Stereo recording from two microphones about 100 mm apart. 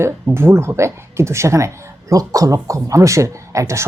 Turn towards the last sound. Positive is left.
turn(degrees=-30)  # may be behind; listen again after turning